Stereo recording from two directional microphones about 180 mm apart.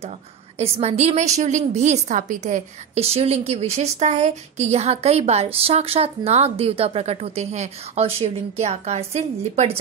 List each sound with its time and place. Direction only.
0.6 s a woman's voice: 35° right (ahead or behind)